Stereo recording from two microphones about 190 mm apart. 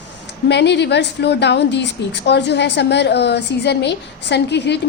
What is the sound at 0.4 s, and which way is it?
A woman's voice, 65° left (ahead or behind).